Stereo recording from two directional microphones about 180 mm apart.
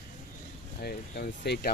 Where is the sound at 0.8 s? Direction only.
65° left (ahead or behind).